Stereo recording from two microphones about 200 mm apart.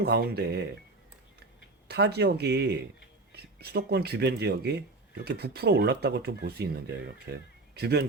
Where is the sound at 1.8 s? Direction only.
55° right (ahead or behind).